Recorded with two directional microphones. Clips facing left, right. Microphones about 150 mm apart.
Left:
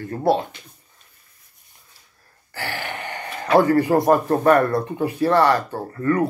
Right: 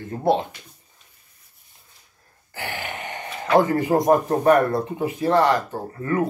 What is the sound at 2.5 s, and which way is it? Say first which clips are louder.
Gasp: left 2 dB; 20° right (ahead or behind).